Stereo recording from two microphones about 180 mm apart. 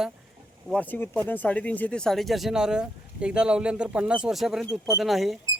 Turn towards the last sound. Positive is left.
turn(degrees=0)  # may be behind; listen again after turning